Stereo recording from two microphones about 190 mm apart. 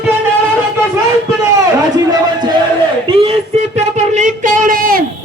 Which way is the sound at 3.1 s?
30° right (ahead or behind).